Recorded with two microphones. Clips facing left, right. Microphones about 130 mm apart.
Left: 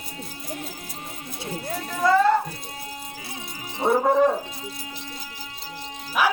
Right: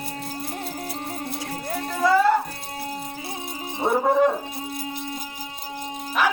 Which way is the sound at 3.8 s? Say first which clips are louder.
Left 1 dB; 20° right (ahead or behind).